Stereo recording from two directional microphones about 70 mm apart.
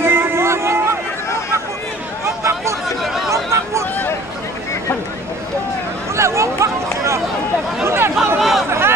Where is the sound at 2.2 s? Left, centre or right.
Right.